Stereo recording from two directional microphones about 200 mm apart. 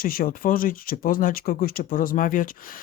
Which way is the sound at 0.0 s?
45° left (ahead or behind).